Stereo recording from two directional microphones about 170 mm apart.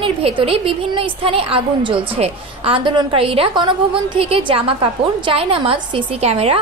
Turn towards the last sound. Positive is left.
turn(degrees=-35)  # may be behind; listen again after turning